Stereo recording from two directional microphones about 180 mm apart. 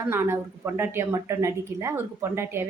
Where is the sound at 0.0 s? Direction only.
15° right (ahead or behind).